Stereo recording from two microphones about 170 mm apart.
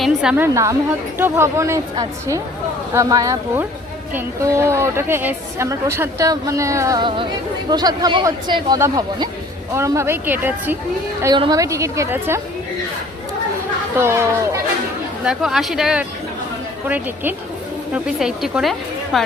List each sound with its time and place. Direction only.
0.0 s a woman's voice: 5° right (ahead or behind)
11.3 s speech: 25° right (ahead or behind)
14.0 s speech: 15° right (ahead or behind)
15.2 s a woman's voice: 5° right (ahead or behind)
17.9 s a woman's voice: 5° right (ahead or behind)